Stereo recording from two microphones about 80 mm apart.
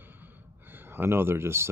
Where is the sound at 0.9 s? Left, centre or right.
Right.